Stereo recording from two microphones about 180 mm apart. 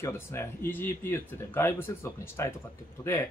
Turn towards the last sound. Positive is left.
turn(degrees=15)  # may be behind; listen again after turning